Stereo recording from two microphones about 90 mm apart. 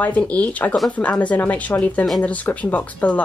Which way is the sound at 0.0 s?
15° left (ahead or behind).